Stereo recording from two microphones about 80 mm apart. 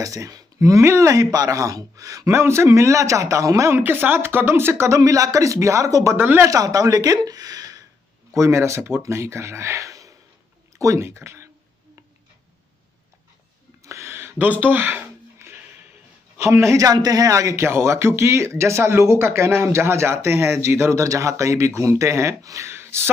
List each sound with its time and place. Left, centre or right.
0.0 s speech: right
2.3 s a man's voice: right
3.8 s a man's voice: right
6.1 s speech: right
6.4 s speech: right
8.4 s a man's voice: right
13.8 s a sound: right
16.4 s a man's voice: right